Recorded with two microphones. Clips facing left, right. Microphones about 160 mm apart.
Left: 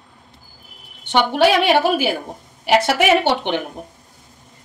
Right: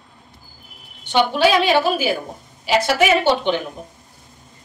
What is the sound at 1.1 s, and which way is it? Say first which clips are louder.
A woman's voice: left 1 dB; 65° left (ahead or behind).